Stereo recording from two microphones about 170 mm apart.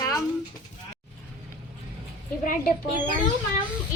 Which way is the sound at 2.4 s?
55° left (ahead or behind).